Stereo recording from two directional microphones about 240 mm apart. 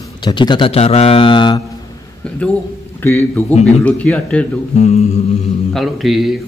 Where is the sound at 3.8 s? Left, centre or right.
Centre.